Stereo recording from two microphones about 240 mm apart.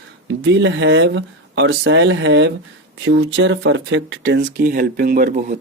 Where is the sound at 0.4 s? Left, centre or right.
Right.